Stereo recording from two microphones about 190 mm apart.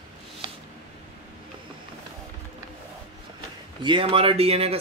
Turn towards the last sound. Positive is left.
turn(degrees=-30)  # may be behind; listen again after turning